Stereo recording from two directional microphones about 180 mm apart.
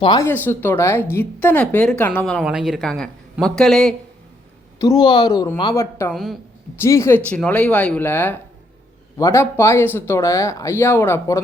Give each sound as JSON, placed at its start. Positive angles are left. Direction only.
{"t": 0.0, "sound": "speech", "side_deg": 25}
{"t": 0.3, "sound": "speech", "side_deg": 10}
{"t": 4.8, "sound": "speech", "side_deg": 20}
{"t": 6.1, "sound": "speech", "side_deg": 0}
{"t": 6.7, "sound": "speech", "side_deg": 15}